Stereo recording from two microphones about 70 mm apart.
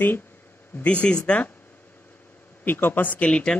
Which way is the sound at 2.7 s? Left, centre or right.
Left.